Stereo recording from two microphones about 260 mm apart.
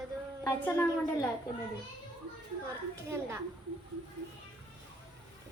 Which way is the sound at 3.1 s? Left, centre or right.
Centre.